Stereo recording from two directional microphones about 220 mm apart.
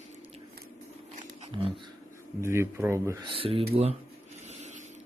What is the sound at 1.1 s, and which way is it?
Wild animals, 25° right (ahead or behind).